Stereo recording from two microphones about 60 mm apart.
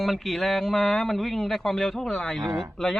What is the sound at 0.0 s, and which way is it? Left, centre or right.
Speech, centre.